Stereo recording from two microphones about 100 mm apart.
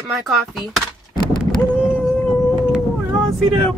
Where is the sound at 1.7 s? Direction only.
15° left (ahead or behind).